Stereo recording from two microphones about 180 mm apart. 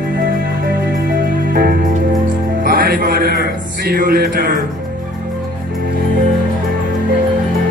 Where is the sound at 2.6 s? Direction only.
55° right (ahead or behind).